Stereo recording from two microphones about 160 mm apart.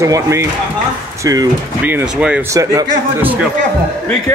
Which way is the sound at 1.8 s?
10° right (ahead or behind).